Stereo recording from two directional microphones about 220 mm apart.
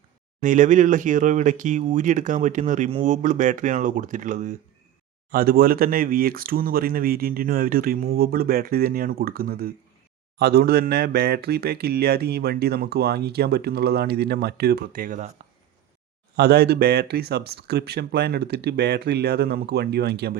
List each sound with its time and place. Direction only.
0.4 s speech: 35° right (ahead or behind)
16.3 s speech: 45° right (ahead or behind)